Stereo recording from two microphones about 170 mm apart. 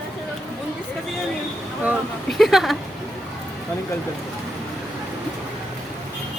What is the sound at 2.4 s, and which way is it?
Speech, centre (ahead or behind).